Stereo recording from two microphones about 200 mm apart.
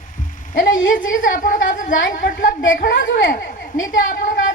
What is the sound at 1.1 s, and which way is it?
A woman's voice, 40° left (ahead or behind).